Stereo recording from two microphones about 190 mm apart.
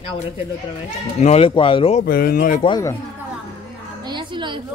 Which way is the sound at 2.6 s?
20° left (ahead or behind).